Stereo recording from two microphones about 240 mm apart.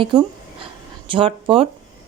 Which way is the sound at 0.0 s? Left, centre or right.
Right.